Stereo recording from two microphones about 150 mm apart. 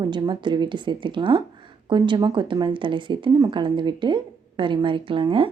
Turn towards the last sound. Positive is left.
turn(degrees=-35)  # may be behind; listen again after turning